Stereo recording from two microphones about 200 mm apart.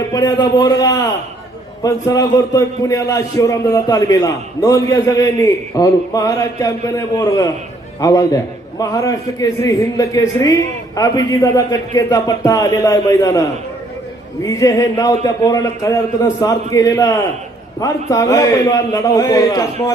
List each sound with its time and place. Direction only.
0.1 s a man's voice: 20° left (ahead or behind)
14.4 s a man's voice: 15° left (ahead or behind)